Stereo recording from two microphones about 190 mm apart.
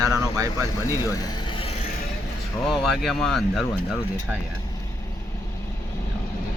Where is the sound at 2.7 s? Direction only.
Centre (ahead or behind).